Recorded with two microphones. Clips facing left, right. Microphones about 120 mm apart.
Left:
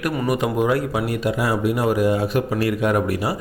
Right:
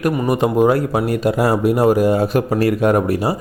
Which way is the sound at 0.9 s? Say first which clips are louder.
Right 5 dB; 45° right (ahead or behind).